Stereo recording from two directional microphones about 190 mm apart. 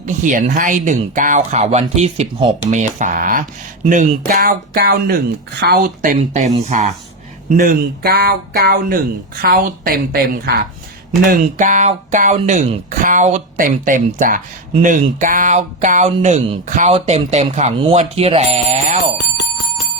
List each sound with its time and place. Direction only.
0.0 s speech: 40° right (ahead or behind)